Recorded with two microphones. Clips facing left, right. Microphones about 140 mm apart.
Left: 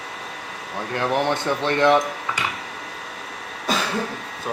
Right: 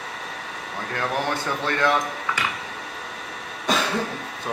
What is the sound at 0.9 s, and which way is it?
Speech, 20° left (ahead or behind).